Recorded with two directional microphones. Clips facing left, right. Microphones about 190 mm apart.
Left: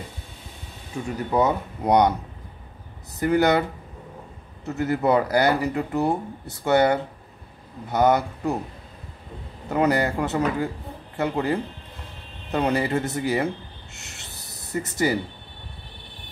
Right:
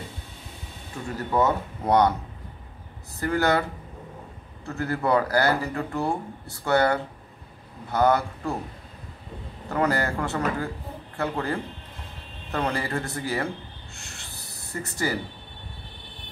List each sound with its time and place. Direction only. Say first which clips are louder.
1.0 s speech: left 2 dB; 15° left (ahead or behind)
3.2 s speech: left 4 dB; 20° left (ahead or behind)
4.6 s speech: left 4 dB; 20° left (ahead or behind)
9.7 s speech: left 3 dB; 20° left (ahead or behind)
13.9 s a sound: even; 20° left (ahead or behind)
14.7 s speech: left 5 dB; 20° left (ahead or behind)